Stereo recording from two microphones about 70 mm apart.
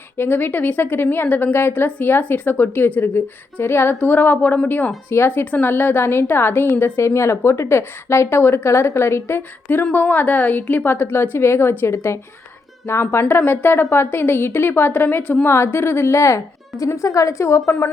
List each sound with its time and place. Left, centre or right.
0.2 s a woman's voice: left